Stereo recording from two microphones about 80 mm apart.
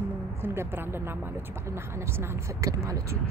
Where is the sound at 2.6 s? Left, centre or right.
Right.